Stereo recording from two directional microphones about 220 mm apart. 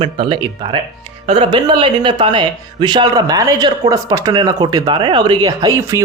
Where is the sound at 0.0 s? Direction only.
20° right (ahead or behind).